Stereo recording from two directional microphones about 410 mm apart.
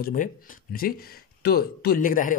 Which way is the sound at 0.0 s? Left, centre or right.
Centre.